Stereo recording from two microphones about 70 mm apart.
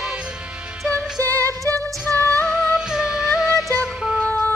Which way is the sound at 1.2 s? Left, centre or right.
Right.